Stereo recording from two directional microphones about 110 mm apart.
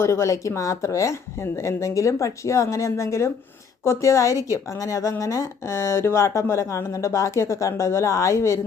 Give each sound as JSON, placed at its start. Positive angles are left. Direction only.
{"t": 0.0, "sound": "speech", "side_deg": 25}